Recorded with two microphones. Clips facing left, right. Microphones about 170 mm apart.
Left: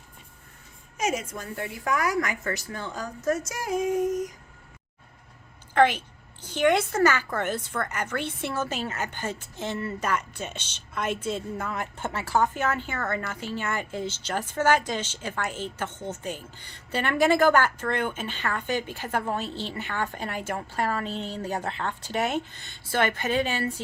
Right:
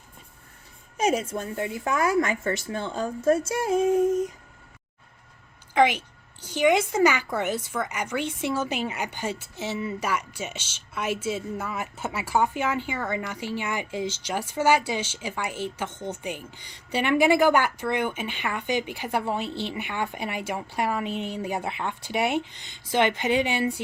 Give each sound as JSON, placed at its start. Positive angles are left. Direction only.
{"t": 0.9, "sound": "a woman's voice", "side_deg": -30}
{"t": 5.7, "sound": "a woman's voice", "side_deg": -15}